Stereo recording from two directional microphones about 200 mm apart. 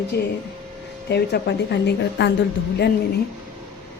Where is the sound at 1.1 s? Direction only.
55° left (ahead or behind).